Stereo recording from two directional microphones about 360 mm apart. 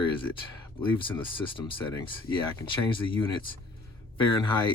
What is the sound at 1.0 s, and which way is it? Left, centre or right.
Speech, centre.